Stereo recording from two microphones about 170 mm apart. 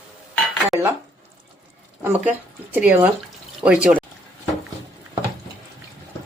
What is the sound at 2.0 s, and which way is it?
Speech, 10° right (ahead or behind).